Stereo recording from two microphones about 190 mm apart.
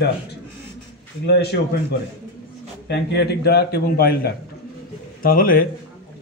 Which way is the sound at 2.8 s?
60° left (ahead or behind).